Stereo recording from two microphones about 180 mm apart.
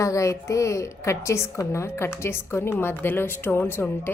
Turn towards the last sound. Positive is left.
turn(degrees=10)  # may be behind; listen again after turning